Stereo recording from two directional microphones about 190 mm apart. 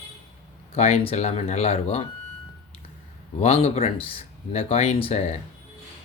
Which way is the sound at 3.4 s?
30° left (ahead or behind).